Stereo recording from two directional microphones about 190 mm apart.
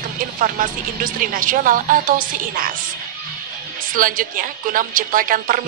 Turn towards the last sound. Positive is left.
turn(degrees=-45)  # may be behind; listen again after turning